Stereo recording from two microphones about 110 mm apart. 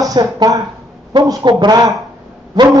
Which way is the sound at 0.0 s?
35° right (ahead or behind).